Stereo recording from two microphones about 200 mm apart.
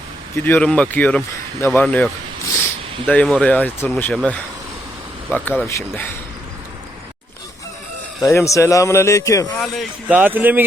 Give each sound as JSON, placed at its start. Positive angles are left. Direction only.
{"t": 0.3, "sound": "speech", "side_deg": 10}
{"t": 3.1, "sound": "speech", "side_deg": 5}
{"t": 8.2, "sound": "speech", "side_deg": 15}
{"t": 9.6, "sound": "a man's voice", "side_deg": -5}